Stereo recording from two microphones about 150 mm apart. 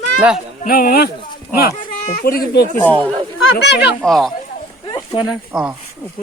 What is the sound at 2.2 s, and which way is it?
Speech, 80° left.